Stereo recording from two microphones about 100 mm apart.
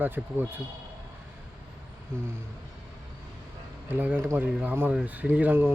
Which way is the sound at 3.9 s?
20° right (ahead or behind).